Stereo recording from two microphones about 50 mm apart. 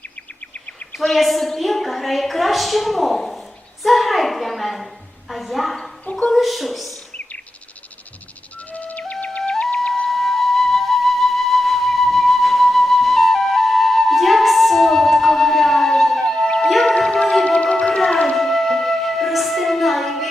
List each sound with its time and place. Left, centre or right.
1.1 s a woman's voice: centre
6.1 s speech: centre
6.3 s a woman's voice: centre
7.1 s bird: left
8.5 s music: left
9.7 s flute: left
10.1 s flute: centre
16.6 s music: centre
16.9 s music: centre
17.4 s music: left; by 20.2 s centre